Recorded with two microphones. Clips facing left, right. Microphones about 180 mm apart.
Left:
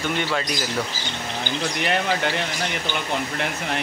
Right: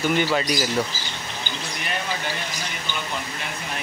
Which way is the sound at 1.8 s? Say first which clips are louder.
Left 6 dB; 70° left (ahead or behind).